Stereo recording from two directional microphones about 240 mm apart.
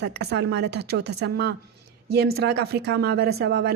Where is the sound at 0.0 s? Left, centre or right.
Right.